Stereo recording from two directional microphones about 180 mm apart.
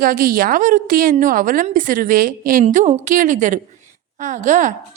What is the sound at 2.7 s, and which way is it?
A woman's voice, 40° right (ahead or behind).